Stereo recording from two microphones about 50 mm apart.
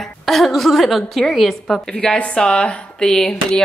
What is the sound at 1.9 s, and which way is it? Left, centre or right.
Speech, centre.